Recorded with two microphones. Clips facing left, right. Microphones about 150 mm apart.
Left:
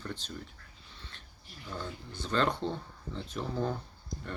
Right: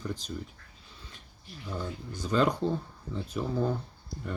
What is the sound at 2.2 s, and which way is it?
Speech, 10° right (ahead or behind).